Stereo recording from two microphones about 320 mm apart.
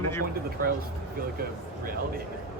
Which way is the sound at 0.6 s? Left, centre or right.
Right.